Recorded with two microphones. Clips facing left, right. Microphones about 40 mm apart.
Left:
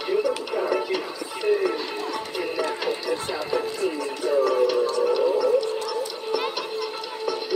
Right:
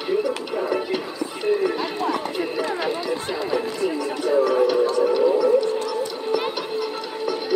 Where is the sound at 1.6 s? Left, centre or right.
Right.